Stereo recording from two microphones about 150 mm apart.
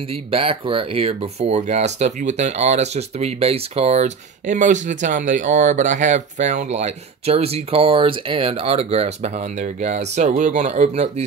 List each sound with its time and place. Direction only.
0.1 s speech: 40° right (ahead or behind)